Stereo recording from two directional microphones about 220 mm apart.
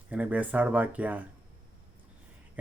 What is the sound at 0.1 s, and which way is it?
Speech, 5° right (ahead or behind).